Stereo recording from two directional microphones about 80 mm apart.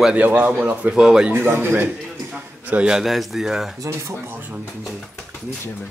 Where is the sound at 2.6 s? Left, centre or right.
Centre.